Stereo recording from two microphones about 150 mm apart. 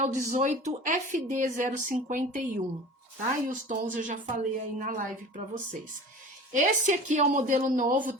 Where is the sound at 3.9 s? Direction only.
55° right (ahead or behind).